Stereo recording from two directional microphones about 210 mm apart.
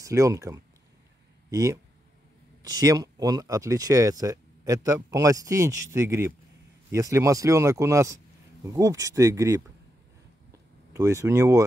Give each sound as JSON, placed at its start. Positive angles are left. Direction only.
{"t": 0.0, "sound": "speech", "side_deg": -15}
{"t": 10.9, "sound": "speech", "side_deg": -15}